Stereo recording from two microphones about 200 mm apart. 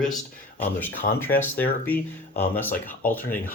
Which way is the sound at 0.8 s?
10° left (ahead or behind).